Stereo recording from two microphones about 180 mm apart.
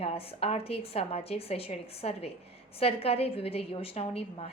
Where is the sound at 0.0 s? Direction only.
35° left (ahead or behind).